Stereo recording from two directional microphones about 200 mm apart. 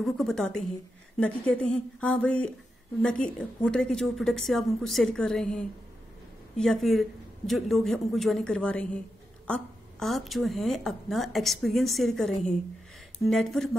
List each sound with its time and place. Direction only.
0.0 s a woman's voice: centre (ahead or behind)